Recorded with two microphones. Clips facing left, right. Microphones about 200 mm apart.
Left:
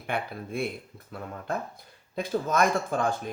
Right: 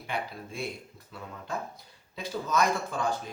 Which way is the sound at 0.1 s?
55° left (ahead or behind).